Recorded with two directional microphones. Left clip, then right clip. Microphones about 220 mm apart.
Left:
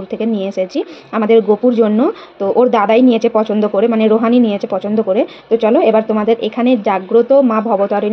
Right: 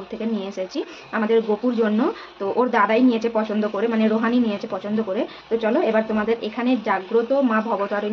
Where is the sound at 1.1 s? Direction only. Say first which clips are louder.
Left 9 dB; 35° left (ahead or behind).